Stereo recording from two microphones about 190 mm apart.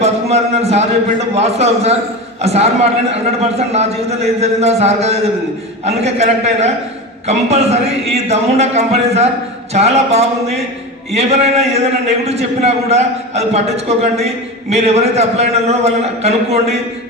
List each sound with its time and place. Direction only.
0.0 s a man's voice: 35° right (ahead or behind)